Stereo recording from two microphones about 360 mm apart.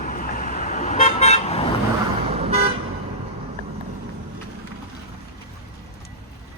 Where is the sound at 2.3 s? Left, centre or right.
Centre.